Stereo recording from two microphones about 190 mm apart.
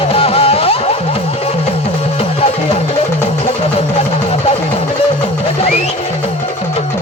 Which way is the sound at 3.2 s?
30° left (ahead or behind).